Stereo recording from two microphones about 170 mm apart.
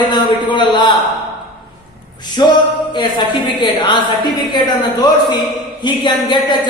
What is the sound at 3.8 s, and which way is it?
Speech, 25° left (ahead or behind).